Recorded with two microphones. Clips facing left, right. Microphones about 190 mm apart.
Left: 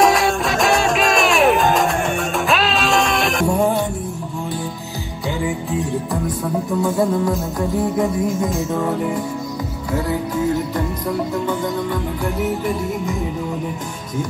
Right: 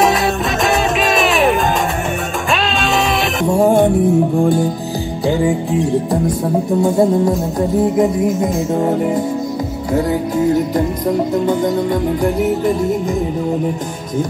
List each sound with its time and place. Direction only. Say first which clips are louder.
0.7 s music: right 1 dB; centre (ahead or behind)
3.6 s music: right 8 dB; 50° right (ahead or behind)
6.4 s music: right 3 dB; 30° right (ahead or behind)
11.4 s music: right 6 dB; 40° right (ahead or behind)